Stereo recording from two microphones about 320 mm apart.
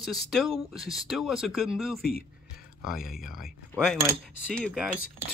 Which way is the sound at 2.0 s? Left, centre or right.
Left.